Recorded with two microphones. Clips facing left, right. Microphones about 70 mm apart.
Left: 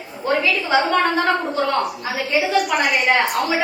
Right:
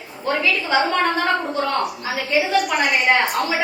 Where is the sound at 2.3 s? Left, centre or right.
Centre.